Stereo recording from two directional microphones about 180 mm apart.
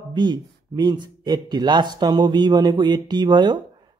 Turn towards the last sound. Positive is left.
turn(degrees=-25)  # may be behind; listen again after turning